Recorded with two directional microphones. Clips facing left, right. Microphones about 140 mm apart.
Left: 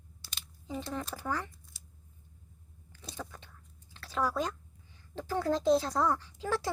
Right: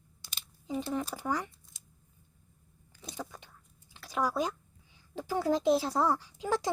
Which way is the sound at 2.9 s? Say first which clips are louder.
Right 2 dB; 10° right (ahead or behind).